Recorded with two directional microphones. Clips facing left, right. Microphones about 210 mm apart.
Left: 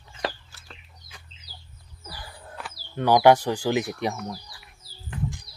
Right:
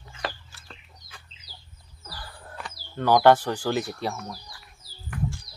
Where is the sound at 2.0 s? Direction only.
10° left (ahead or behind).